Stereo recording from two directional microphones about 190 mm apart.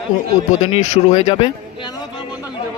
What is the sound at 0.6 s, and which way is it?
Speech, 35° left (ahead or behind).